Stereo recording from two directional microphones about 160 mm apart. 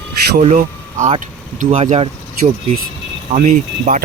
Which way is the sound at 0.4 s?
45° right (ahead or behind).